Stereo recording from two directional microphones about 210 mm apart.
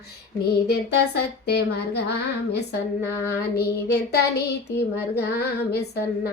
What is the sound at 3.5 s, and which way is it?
Speech, 50° left (ahead or behind).